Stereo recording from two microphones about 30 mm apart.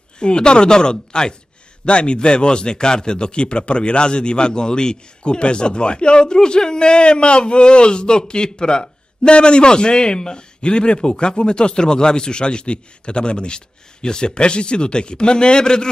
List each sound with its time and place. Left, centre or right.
0.2 s a man's voice: left